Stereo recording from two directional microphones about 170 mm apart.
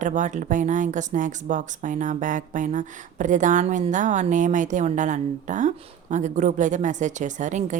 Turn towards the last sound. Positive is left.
turn(degrees=-45)  # may be behind; listen again after turning